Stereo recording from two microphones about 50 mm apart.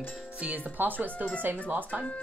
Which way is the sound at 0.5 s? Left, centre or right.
Right.